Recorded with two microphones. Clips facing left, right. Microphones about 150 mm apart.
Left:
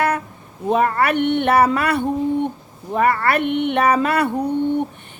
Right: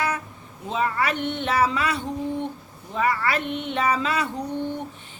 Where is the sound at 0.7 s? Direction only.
55° left (ahead or behind).